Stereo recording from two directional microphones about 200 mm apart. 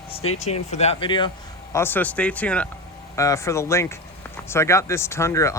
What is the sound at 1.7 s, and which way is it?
Speech, 10° left (ahead or behind).